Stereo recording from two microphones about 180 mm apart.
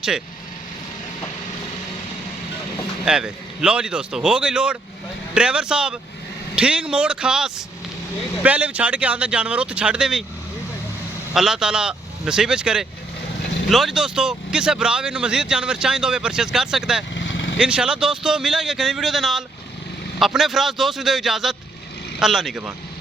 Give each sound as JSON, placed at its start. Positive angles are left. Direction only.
{"t": 3.0, "sound": "speech", "side_deg": -5}
{"t": 11.3, "sound": "speech", "side_deg": -5}
{"t": 17.2, "sound": "vehicle", "side_deg": 90}
{"t": 17.6, "sound": "speech", "side_deg": -5}